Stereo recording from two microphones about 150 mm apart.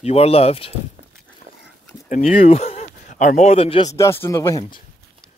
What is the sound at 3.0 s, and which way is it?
Speech, 55° left (ahead or behind).